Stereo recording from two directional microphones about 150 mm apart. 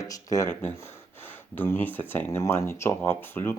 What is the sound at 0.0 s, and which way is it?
Speech, 20° left (ahead or behind).